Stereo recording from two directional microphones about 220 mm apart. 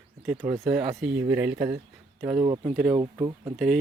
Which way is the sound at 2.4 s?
20° right (ahead or behind).